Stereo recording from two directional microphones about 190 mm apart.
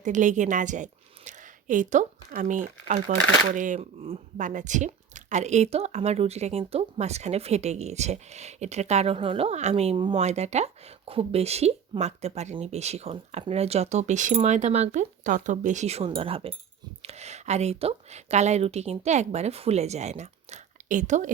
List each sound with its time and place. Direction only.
0.0 s speech: 40° right (ahead or behind)